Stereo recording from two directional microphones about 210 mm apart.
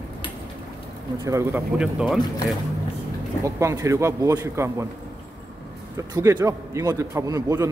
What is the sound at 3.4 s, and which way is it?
A man's voice, 15° right (ahead or behind).